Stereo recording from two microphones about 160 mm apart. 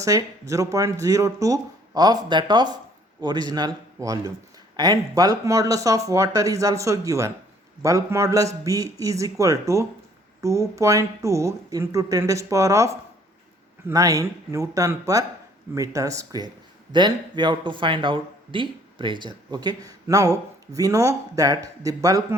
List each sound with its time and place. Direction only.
0.0 s speech: 20° right (ahead or behind)
4.8 s speech: 25° right (ahead or behind)